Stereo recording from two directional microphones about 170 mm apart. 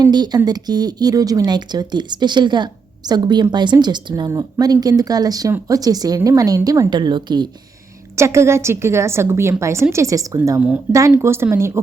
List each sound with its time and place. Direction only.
0.0 s speech: 25° right (ahead or behind)
8.1 s a woman's voice: 15° right (ahead or behind)